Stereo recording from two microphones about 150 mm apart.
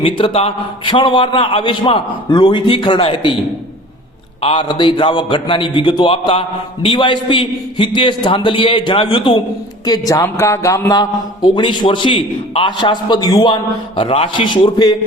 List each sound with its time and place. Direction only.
0.0 s a man's voice: 40° left (ahead or behind)
4.4 s a man's voice: 35° left (ahead or behind)